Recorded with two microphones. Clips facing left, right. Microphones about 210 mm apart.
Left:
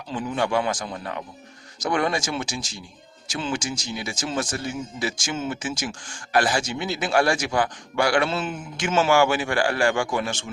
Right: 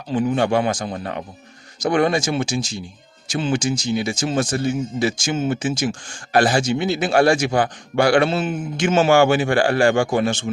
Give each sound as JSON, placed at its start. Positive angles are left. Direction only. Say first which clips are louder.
{"t": 0.1, "sound": "speech", "louder": "right 6 dB", "side_deg": -25}
{"t": 1.9, "sound": "speech", "louder": "right 6 dB", "side_deg": -25}